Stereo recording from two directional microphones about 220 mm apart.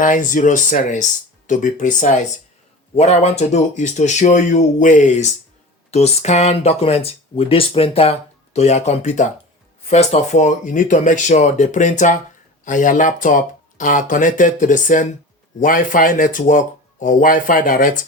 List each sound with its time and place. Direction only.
0.0 s speech: 35° left (ahead or behind)